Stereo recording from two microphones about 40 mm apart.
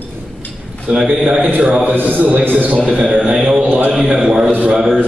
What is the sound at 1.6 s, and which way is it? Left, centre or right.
Speech, right.